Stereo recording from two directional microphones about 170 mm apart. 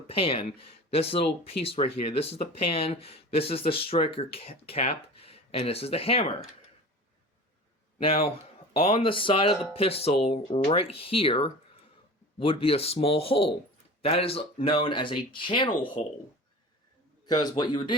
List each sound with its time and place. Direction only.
0.1 s speech: 35° left (ahead or behind)
7.9 s speech: 35° left (ahead or behind)
16.0 s speech: 45° left (ahead or behind)
17.2 s a man's voice: 25° left (ahead or behind)